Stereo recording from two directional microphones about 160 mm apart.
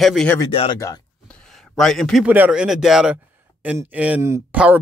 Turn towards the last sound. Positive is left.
turn(degrees=-15)  # may be behind; listen again after turning